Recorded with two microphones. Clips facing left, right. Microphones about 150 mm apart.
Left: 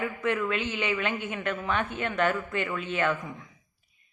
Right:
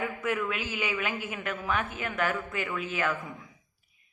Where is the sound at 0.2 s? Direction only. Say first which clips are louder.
Left 5 dB; 5° right (ahead or behind).